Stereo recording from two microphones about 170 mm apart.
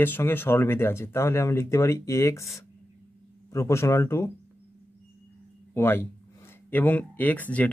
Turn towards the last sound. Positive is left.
turn(degrees=10)  # may be behind; listen again after turning